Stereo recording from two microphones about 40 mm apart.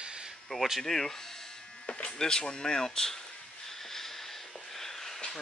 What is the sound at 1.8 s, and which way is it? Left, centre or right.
Speech, left.